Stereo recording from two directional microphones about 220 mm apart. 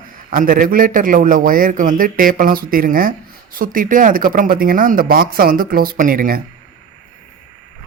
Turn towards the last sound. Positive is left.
turn(degrees=-40)  # may be behind; listen again after turning